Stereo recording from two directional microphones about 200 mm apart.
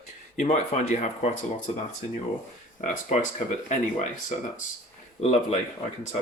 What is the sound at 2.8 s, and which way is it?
Speech, 40° left (ahead or behind).